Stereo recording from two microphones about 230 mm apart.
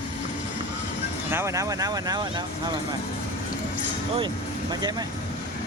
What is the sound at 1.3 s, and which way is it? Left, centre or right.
Speech, centre.